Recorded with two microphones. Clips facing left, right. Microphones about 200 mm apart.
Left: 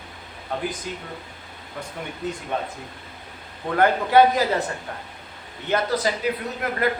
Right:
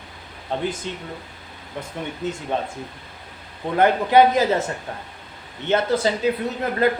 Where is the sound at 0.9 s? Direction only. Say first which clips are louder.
Right 2 dB; 25° right (ahead or behind).